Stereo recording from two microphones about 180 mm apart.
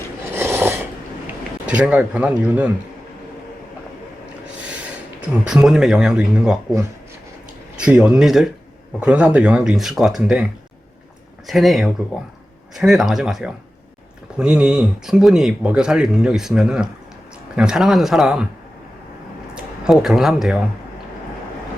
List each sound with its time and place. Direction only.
0.3 s filing: 15° right (ahead or behind)
1.6 s speech: 5° right (ahead or behind)
5.5 s speech: 5° right (ahead or behind)
7.8 s speech: 5° right (ahead or behind)
19.5 s a man's voice: 5° right (ahead or behind)